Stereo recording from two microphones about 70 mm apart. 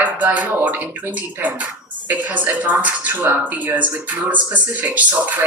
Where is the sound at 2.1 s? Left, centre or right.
Right.